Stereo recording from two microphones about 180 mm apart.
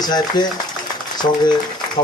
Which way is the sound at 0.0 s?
25° left (ahead or behind).